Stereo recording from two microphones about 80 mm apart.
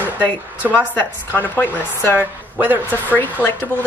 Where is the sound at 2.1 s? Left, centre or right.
Right.